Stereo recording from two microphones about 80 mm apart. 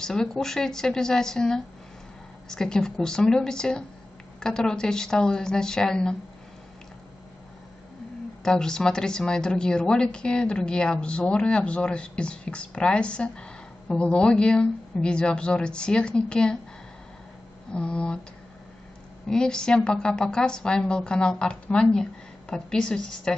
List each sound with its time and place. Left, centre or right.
0.0 s a woman's voice: centre
8.5 s a woman's voice: centre
17.7 s a woman's voice: centre
19.2 s a woman's voice: centre